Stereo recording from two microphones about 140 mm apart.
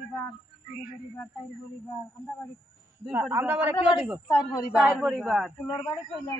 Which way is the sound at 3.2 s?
15° right (ahead or behind).